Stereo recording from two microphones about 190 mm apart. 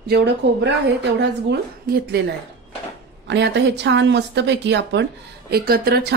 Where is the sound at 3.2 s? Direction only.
65° right (ahead or behind).